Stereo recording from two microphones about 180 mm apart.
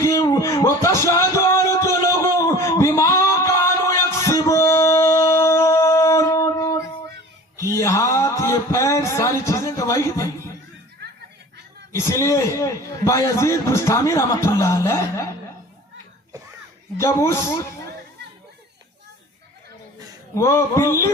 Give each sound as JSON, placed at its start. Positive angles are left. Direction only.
{"t": 0.0, "sound": "a sound", "side_deg": 15}
{"t": 11.9, "sound": "a man's voice", "side_deg": 15}
{"t": 17.0, "sound": "a man's voice", "side_deg": 15}
{"t": 20.3, "sound": "a man's voice", "side_deg": 15}